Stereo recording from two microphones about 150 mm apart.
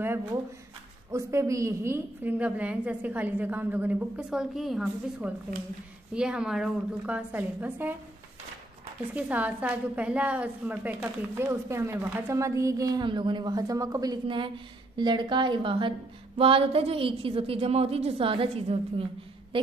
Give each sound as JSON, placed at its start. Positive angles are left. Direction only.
{"t": 0.0, "sound": "a woman's voice", "side_deg": -15}
{"t": 9.1, "sound": "a woman's voice", "side_deg": -10}